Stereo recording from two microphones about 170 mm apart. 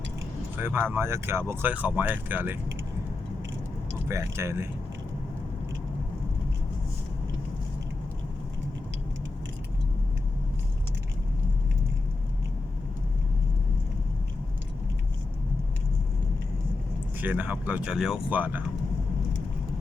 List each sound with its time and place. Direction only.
0.5 s speech: 10° right (ahead or behind)
4.1 s speech: 15° right (ahead or behind)
17.2 s speech: 10° right (ahead or behind)